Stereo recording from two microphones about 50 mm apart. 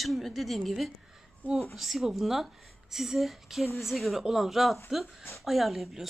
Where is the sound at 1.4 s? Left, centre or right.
Left.